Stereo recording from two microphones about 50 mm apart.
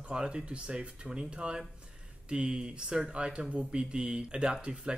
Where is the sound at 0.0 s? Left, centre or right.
Centre.